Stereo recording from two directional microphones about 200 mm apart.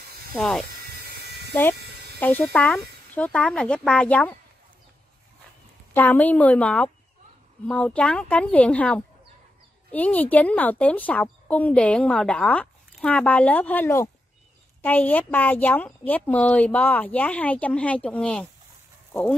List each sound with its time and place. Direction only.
0.3 s speech: centre (ahead or behind)
0.8 s electric shaver: 55° right (ahead or behind)
1.5 s a woman's voice: 10° left (ahead or behind)
5.9 s a woman's voice: 10° left (ahead or behind)